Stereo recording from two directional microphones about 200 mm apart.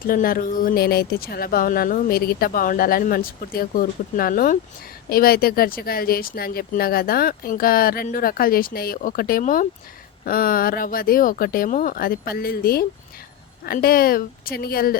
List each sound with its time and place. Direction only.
0.1 s speech: 45° left (ahead or behind)